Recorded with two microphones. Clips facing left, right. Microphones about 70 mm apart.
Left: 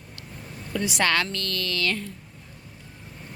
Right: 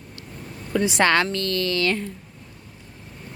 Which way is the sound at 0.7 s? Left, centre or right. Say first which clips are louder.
Right 5 dB; right.